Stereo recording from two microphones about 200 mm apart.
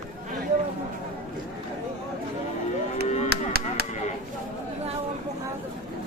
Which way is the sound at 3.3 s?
50° right (ahead or behind).